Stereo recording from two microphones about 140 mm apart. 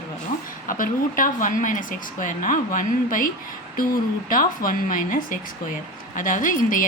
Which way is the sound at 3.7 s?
85° left.